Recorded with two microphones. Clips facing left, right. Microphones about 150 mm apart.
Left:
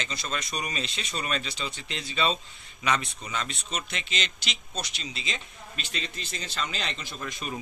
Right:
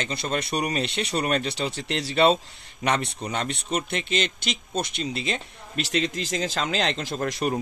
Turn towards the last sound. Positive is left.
turn(degrees=-70)  # may be behind; listen again after turning